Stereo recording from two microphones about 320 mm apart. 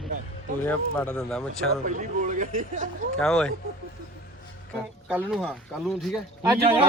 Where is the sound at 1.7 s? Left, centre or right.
Right.